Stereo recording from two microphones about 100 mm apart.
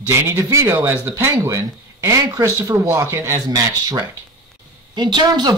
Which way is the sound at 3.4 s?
40° right (ahead or behind).